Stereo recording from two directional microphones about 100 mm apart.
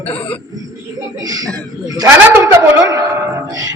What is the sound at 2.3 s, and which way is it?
Speech, 25° right (ahead or behind).